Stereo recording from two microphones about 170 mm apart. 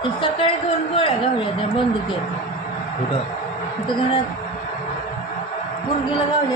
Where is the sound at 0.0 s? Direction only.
30° left (ahead or behind).